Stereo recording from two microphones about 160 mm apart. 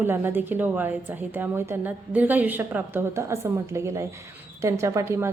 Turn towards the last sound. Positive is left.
turn(degrees=-15)  # may be behind; listen again after turning